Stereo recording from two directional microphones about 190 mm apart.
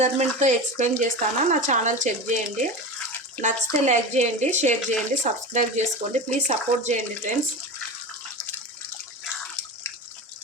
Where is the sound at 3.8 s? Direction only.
40° right (ahead or behind).